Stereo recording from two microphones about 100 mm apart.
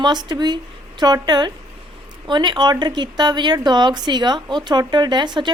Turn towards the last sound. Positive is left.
turn(degrees=-50)  # may be behind; listen again after turning